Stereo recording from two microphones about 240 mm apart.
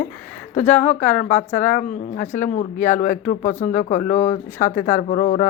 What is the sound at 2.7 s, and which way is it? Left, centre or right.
Speech, centre.